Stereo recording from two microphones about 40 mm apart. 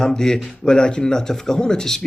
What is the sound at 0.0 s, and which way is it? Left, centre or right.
Speech, centre.